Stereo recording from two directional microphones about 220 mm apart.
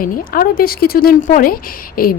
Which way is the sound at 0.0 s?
40° left (ahead or behind).